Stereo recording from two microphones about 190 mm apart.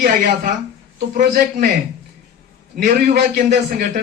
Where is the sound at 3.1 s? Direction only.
60° right (ahead or behind).